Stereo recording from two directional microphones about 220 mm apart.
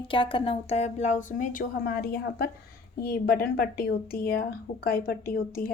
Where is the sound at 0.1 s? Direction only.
25° left (ahead or behind).